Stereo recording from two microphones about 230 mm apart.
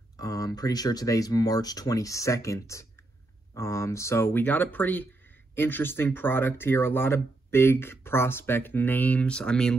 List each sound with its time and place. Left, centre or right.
0.2 s speech: centre